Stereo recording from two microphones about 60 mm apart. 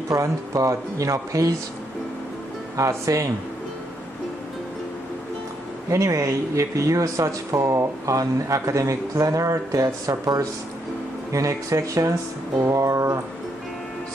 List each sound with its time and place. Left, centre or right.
0.1 s speech: right
2.7 s speech: right
5.9 s speech: right
8.1 s speech: right
11.3 s speech: right